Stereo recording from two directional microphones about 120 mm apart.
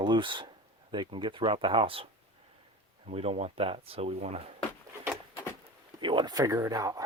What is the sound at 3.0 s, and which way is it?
Speech, 55° right (ahead or behind).